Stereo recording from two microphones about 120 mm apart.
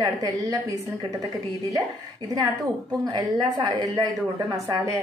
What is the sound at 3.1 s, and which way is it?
A woman's voice, 35° right (ahead or behind).